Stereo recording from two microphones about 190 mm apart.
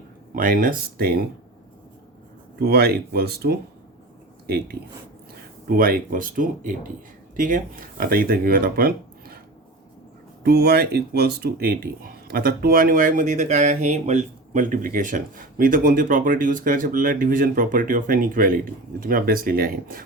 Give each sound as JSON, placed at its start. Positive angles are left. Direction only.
{"t": 0.3, "sound": "speech", "side_deg": -45}
{"t": 2.6, "sound": "speech", "side_deg": -55}
{"t": 10.4, "sound": "speech", "side_deg": -55}